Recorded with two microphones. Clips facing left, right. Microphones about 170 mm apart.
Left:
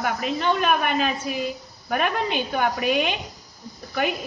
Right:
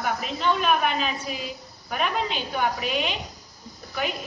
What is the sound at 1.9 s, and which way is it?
A woman's voice, 55° left (ahead or behind).